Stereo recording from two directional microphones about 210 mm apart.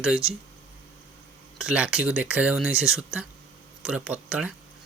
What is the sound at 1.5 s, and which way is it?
Speech, 5° right (ahead or behind).